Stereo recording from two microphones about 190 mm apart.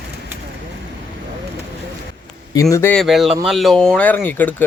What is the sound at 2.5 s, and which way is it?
Speech, 15° left (ahead or behind).